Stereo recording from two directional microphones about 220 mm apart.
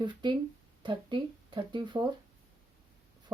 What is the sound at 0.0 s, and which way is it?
Speech, 20° right (ahead or behind).